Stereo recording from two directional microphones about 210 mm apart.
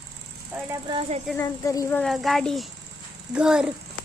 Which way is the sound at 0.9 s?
30° right (ahead or behind).